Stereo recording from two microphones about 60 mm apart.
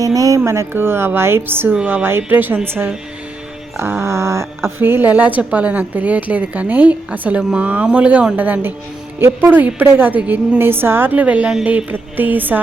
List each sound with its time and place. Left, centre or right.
0.0 s speech: right
0.7 s a woman's voice: right
4.0 s a sound: right
4.8 s a woman's voice: right
9.1 s a woman's voice: right